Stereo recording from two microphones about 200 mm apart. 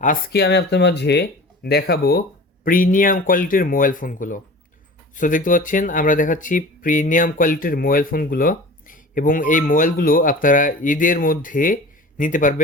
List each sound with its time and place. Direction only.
0.0 s speech: 50° left (ahead or behind)